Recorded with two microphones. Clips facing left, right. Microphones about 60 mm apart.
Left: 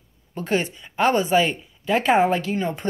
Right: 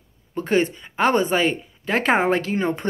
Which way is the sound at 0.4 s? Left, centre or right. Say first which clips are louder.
Right 3 dB; right.